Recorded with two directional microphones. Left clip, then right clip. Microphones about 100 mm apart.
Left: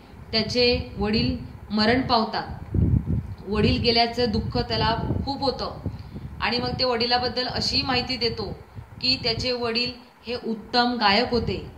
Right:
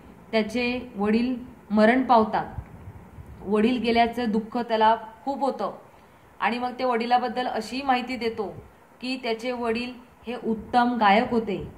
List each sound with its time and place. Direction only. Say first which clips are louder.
0.3 s a woman's voice: left 4 dB; 70° right (ahead or behind)
3.4 s a woman's voice: left 1 dB; 70° right (ahead or behind)